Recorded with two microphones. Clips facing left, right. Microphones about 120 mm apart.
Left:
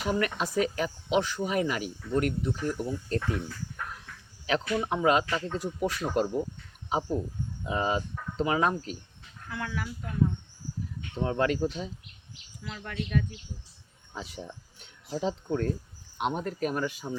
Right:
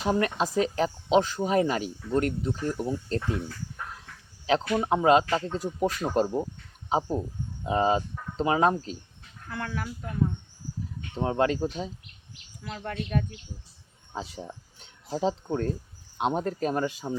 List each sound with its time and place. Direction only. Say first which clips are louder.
0.0 s speech: right 3 dB; 30° right (ahead or behind)
4.7 s speech: right 4 dB; 30° right (ahead or behind)
7.6 s speech: right 5 dB; 35° right (ahead or behind)
9.5 s speech: right 1 dB; 50° right (ahead or behind)
11.2 s speech: right 2 dB; 30° right (ahead or behind)
12.6 s speech: right 2 dB; 45° right (ahead or behind)
14.1 s speech: right 3 dB; 30° right (ahead or behind)